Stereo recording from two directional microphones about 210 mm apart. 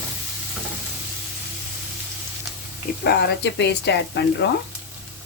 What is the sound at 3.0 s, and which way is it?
Speech, 55° left (ahead or behind).